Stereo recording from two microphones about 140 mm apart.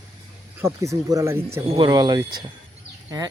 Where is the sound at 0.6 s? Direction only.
20° right (ahead or behind).